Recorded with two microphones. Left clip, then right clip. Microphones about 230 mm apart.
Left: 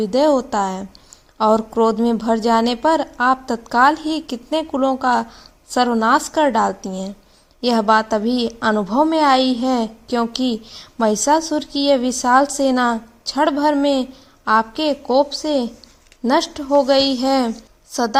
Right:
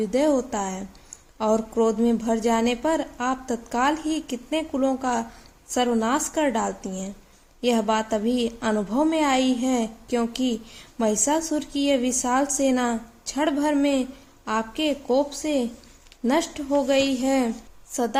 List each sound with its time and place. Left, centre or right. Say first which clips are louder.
0.0 s speech: left 6 dB; left
8.2 s a woman's voice: left 4 dB; centre
8.5 s a woman's voice: left 7 dB; left